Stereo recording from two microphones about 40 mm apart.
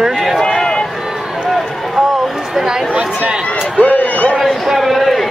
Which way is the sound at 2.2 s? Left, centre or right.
Centre.